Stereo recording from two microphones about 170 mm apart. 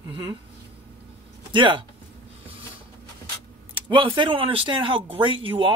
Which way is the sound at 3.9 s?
30° right (ahead or behind).